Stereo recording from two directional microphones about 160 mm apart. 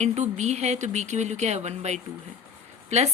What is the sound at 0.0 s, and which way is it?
A woman's voice, 45° right (ahead or behind).